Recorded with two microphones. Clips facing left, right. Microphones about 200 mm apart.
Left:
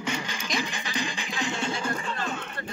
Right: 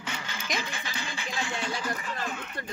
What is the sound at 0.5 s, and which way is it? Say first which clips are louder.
Music: left 6 dB; 20° left (ahead or behind).